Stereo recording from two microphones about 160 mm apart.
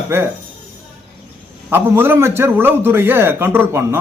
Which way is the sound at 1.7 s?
15° right (ahead or behind).